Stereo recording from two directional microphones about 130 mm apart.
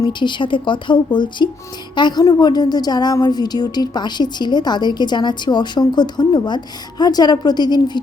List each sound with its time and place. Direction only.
0.0 s a woman's voice: 35° left (ahead or behind)